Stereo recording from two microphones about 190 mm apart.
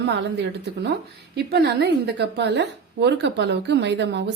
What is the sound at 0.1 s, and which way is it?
A woman's voice, 65° right (ahead or behind).